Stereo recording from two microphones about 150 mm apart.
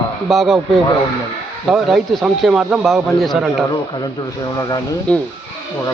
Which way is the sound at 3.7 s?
30° left (ahead or behind).